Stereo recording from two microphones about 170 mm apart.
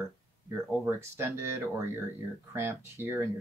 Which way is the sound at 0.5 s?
15° right (ahead or behind).